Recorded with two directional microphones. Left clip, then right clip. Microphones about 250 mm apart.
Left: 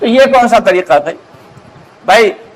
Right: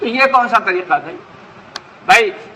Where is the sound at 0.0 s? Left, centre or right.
Left.